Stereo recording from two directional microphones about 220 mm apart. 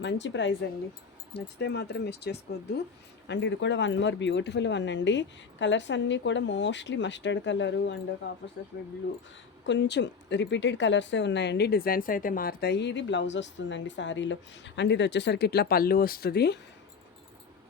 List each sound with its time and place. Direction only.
0.0 s speech: 55° left (ahead or behind)
1.5 s speech: 50° left (ahead or behind)
9.6 s speech: 55° left (ahead or behind)